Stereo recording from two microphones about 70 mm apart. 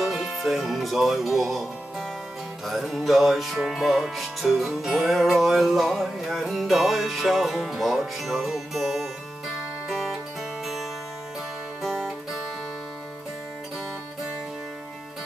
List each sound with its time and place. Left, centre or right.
0.0 s music: centre
1.5 s speech: centre
2.6 s music: centre